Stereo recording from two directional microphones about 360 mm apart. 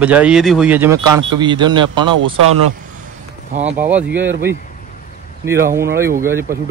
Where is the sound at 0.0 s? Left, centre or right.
Centre.